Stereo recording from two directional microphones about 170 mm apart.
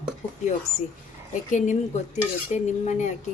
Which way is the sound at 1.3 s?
45° left (ahead or behind).